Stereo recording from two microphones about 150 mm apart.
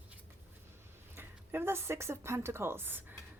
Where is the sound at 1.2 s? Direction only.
15° right (ahead or behind).